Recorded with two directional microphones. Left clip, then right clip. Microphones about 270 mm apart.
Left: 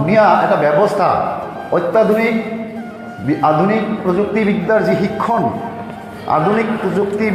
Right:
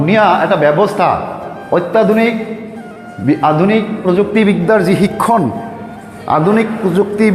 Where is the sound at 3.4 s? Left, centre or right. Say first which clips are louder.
Right 1 dB; right.